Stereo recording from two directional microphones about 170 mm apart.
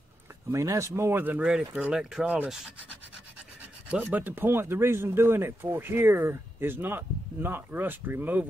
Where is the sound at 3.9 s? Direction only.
10° right (ahead or behind).